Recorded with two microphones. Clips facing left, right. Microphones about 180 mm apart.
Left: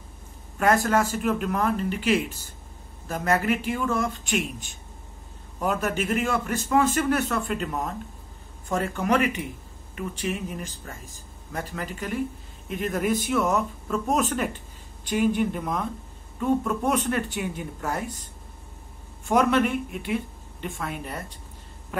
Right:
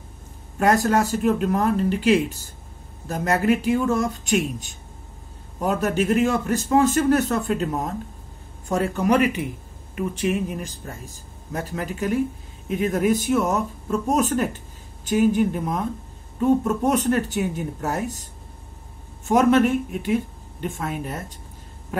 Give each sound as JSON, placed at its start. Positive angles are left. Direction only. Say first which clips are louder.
{"t": 0.6, "sound": "a man's voice", "louder": "right 2 dB", "side_deg": -40}
{"t": 19.2, "sound": "speech", "louder": "right 4 dB", "side_deg": -45}